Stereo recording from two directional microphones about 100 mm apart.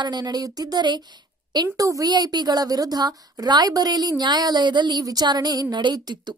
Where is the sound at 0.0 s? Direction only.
45° right (ahead or behind).